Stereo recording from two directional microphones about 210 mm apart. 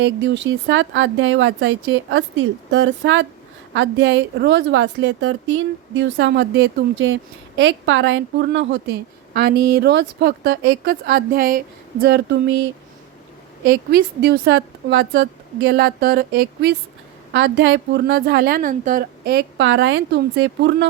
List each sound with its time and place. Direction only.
0.0 s a woman's voice: 60° right (ahead or behind)
13.7 s a woman's voice: 50° right (ahead or behind)